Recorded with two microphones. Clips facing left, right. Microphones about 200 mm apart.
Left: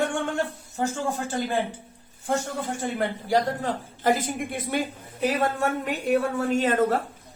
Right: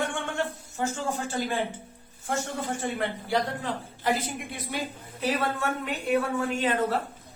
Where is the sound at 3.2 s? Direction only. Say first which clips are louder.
Left 6 dB; 40° left (ahead or behind).